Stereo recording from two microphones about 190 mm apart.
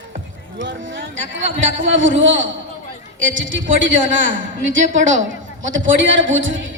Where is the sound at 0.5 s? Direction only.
75° right (ahead or behind).